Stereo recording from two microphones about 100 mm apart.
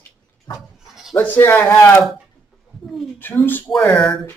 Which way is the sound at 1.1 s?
20° left (ahead or behind).